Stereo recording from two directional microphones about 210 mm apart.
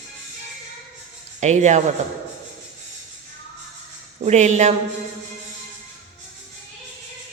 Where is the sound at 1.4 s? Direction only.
35° right (ahead or behind).